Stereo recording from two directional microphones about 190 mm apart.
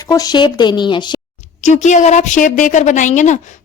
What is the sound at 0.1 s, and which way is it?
A woman's voice, 20° left (ahead or behind).